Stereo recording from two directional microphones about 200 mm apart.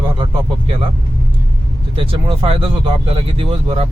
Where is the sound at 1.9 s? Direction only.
25° right (ahead or behind).